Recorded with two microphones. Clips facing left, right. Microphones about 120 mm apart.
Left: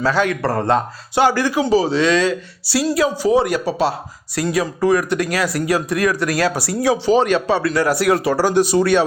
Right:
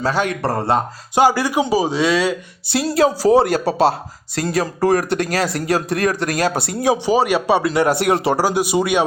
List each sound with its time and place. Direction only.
0.0 s speech: 20° right (ahead or behind)
2.8 s speech: 30° right (ahead or behind); by 7.7 s 15° right (ahead or behind)
7.7 s speech: 25° right (ahead or behind)
8.4 s speech: 10° right (ahead or behind)